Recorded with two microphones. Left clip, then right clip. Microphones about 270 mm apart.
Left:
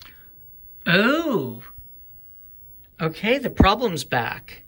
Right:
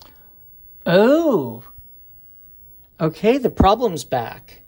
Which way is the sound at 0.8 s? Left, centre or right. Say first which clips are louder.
Right 5 dB; centre.